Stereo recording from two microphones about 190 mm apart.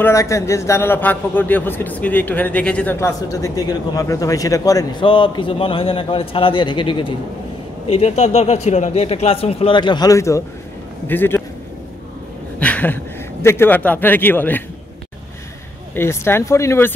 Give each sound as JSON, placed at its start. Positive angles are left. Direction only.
{"t": 0.0, "sound": "a man's voice", "side_deg": 15}
{"t": 12.5, "sound": "speech", "side_deg": 5}
{"t": 15.9, "sound": "a man's voice", "side_deg": 10}